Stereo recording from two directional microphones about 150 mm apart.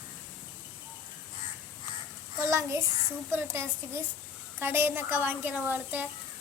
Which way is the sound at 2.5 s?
20° right (ahead or behind).